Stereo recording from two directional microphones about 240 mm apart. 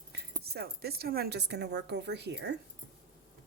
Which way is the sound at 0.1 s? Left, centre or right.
Right.